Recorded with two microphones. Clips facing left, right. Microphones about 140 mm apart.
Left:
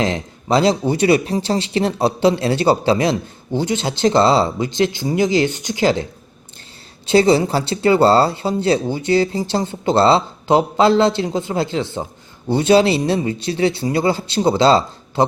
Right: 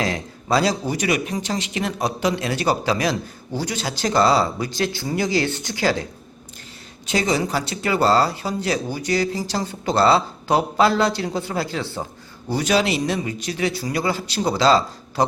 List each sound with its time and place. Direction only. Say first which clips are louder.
0.0 s speech: left 4 dB; 25° left (ahead or behind)
7.1 s speech: left 8 dB; 30° left (ahead or behind)